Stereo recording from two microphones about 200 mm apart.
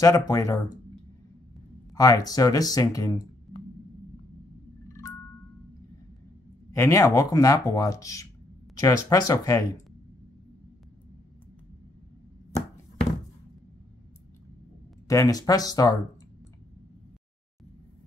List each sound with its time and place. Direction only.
0.0 s speech: 15° left (ahead or behind)
2.0 s speech: 15° left (ahead or behind)
4.8 s marimba: 15° left (ahead or behind)
6.7 s speech: 15° left (ahead or behind)
15.0 s speech: 15° left (ahead or behind)